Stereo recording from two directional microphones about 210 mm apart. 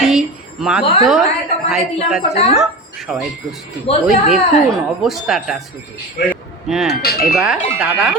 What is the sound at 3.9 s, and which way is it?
Speech, 25° left (ahead or behind).